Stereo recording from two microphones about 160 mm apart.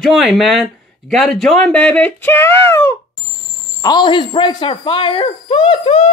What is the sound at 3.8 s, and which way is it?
Speech, 30° left (ahead or behind).